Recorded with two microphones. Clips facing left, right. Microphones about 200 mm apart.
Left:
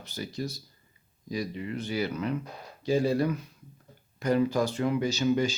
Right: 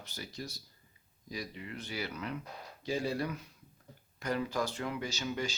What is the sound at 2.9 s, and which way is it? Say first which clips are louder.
Speech: left 9 dB; 40° left (ahead or behind).